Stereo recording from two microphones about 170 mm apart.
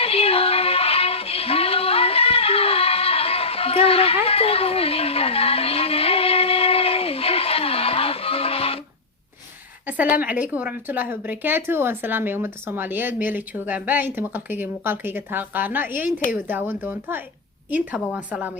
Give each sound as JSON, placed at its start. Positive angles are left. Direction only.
{"t": 0.0, "sound": "music", "side_deg": 35}
{"t": 9.8, "sound": "a woman's voice", "side_deg": -10}